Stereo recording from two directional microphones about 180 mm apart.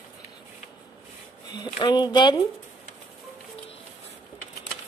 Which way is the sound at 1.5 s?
25° left (ahead or behind).